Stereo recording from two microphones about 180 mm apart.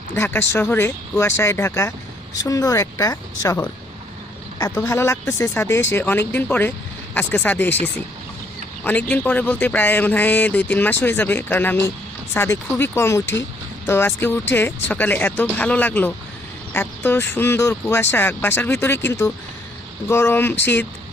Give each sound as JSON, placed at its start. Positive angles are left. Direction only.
{"t": 0.1, "sound": "speech", "side_deg": 15}
{"t": 4.7, "sound": "speech", "side_deg": 10}